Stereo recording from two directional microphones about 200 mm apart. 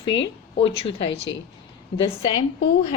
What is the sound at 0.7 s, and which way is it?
Speech, 30° left (ahead or behind).